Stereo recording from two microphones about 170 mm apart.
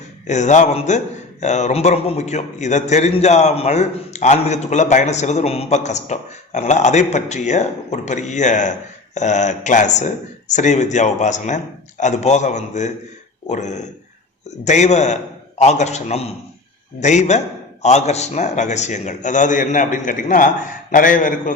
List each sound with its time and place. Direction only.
0.3 s a man's voice: 45° left (ahead or behind)